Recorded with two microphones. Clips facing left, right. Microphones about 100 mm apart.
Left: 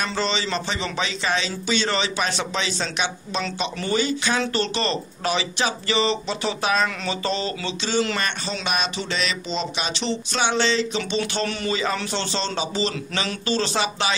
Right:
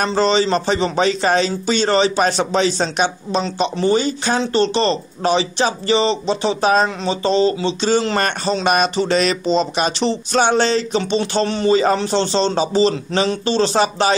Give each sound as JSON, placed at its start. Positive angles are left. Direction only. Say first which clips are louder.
{"t": 0.0, "sound": "speech", "louder": "right 9 dB", "side_deg": -40}